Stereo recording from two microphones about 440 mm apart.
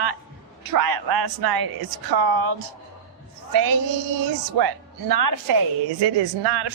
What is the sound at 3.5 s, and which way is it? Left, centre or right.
A woman's voice, right.